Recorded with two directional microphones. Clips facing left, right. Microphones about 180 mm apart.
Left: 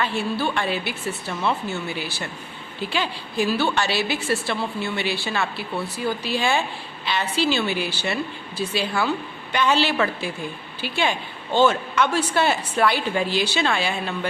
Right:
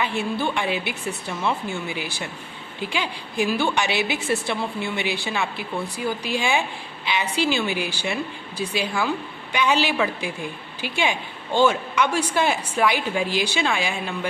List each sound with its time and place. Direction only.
0.0 s a woman's voice: 15° right (ahead or behind)